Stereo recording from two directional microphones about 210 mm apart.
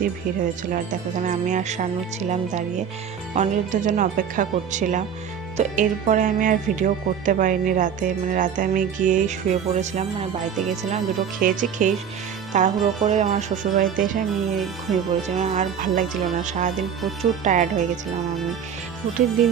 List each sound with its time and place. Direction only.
0.7 s speech: 35° right (ahead or behind)
14.9 s speech: centre (ahead or behind)
15.4 s speech: 35° right (ahead or behind)